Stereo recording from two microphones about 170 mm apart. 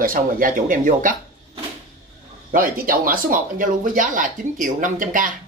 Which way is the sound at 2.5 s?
55° right (ahead or behind).